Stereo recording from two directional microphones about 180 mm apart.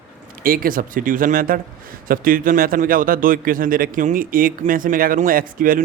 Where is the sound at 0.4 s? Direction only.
50° right (ahead or behind).